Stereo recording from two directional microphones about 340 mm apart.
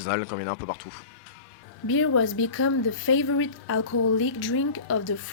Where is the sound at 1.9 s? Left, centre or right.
Left.